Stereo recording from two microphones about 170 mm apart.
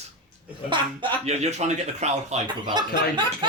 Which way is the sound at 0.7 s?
35° right (ahead or behind).